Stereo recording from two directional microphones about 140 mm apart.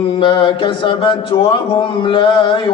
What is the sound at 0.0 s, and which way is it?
Speech, 40° left (ahead or behind).